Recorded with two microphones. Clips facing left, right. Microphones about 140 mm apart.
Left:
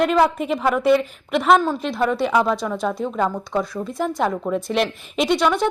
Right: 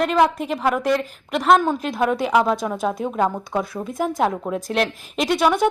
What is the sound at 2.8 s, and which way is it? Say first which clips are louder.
Speech: right 1 dB; 15° right (ahead or behind).